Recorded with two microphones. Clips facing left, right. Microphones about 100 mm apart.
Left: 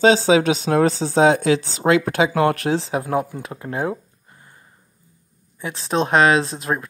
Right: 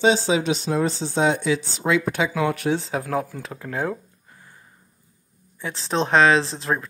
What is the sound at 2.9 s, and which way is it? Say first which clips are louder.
Speech: left 3 dB; 20° left (ahead or behind).